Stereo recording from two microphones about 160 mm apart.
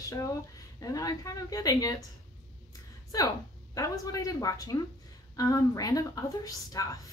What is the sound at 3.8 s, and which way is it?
A woman's voice, 20° left (ahead or behind).